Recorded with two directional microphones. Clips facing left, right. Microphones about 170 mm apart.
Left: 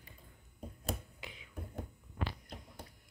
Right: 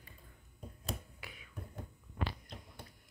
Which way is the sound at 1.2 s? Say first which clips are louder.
Left 2 dB; 20° left (ahead or behind).